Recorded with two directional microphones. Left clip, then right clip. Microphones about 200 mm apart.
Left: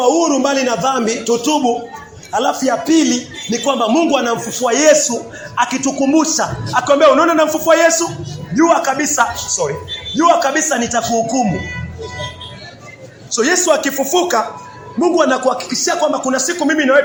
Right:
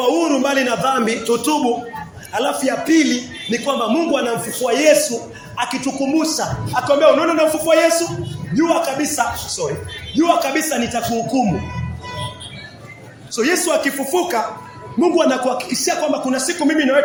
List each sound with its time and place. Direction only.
0.0 s a man's voice: centre (ahead or behind)
13.3 s a man's voice: 5° right (ahead or behind)